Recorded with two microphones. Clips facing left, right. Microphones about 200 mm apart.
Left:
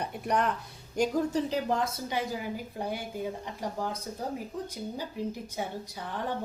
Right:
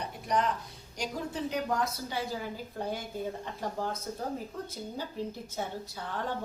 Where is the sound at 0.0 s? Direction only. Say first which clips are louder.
Left 2 dB; 60° left (ahead or behind).